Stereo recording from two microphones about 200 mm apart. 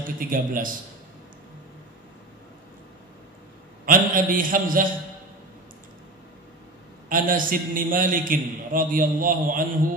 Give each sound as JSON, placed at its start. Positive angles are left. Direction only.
{"t": 0.0, "sound": "a man's voice", "side_deg": -45}
{"t": 3.8, "sound": "a man's voice", "side_deg": -45}
{"t": 7.1, "sound": "a man's voice", "side_deg": -45}